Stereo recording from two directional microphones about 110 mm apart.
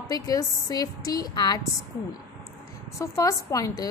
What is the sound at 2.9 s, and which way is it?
Speech, 30° left (ahead or behind).